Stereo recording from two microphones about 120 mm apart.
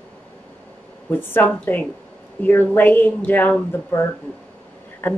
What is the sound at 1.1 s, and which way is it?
A woman's voice, 15° left (ahead or behind).